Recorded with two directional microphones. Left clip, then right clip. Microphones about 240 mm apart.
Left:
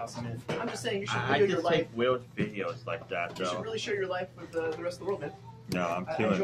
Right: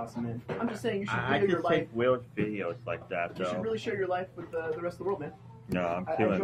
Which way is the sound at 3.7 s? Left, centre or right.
Right.